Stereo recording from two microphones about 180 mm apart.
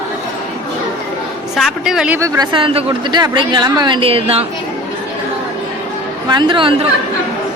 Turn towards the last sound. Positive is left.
turn(degrees=-30)  # may be behind; listen again after turning